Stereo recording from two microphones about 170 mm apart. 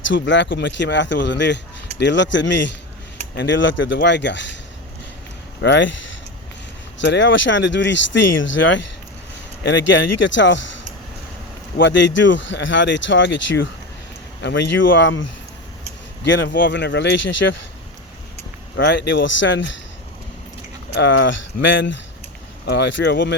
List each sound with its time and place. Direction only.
0.1 s speech: 90° left
5.6 s speech: 90° left
11.8 s speech: 90° left
16.2 s speech: 90° left
18.8 s speech: 90° left
20.9 s speech: 90° left